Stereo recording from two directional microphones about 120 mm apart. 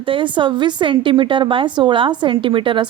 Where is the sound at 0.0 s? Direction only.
45° right (ahead or behind).